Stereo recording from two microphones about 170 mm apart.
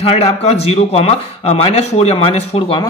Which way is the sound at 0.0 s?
40° left (ahead or behind).